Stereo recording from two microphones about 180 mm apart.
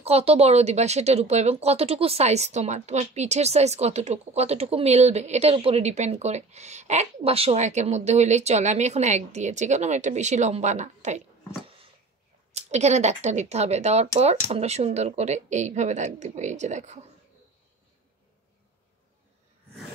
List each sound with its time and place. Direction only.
0.0 s speech: 35° right (ahead or behind)
12.5 s speech: 40° right (ahead or behind)